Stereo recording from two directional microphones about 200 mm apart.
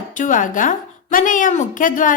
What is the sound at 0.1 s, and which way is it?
A woman's voice, 40° left (ahead or behind).